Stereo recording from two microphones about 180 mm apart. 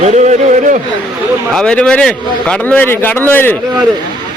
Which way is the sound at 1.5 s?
5° left (ahead or behind).